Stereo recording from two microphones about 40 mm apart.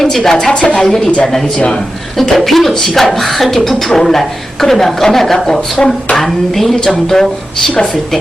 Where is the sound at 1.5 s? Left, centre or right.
Left.